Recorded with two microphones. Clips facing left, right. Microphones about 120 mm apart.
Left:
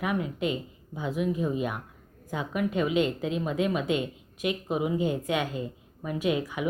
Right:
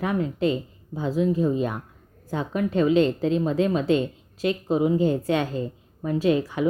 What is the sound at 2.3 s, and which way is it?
Speech, 10° left (ahead or behind).